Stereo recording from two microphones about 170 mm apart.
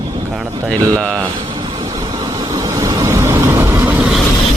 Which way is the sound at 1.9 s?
20° right (ahead or behind).